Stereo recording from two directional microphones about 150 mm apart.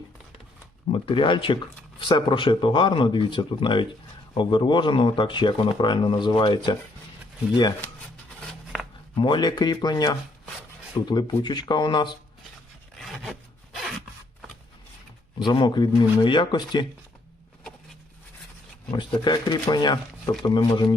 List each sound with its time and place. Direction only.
0.9 s speech: 35° left (ahead or behind)
8.7 s a sound: centre (ahead or behind)
9.1 s speech: 30° left (ahead or behind)
13.0 s rub: centre (ahead or behind)
13.7 s zipper: centre (ahead or behind)
15.4 s speech: 30° left (ahead or behind)
19.2 s speech: 30° left (ahead or behind)